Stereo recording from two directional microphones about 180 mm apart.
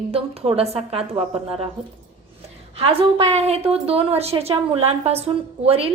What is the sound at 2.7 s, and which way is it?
A woman's voice, 30° right (ahead or behind).